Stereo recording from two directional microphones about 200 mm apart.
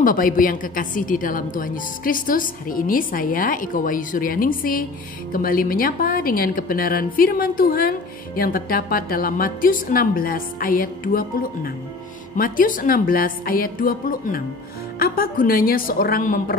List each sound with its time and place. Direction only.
0.0 s a woman's voice: 45° left (ahead or behind)